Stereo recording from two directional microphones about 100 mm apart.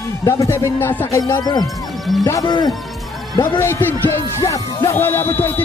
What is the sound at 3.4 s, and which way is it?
Speech, 25° left (ahead or behind).